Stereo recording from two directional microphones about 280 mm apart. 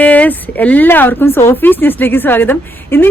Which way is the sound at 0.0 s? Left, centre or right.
Centre.